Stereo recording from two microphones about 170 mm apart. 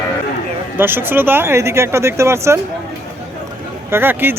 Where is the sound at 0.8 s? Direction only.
10° right (ahead or behind).